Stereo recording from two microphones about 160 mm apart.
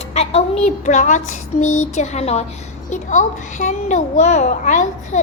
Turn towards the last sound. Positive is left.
turn(degrees=50)  # may be behind; listen again after turning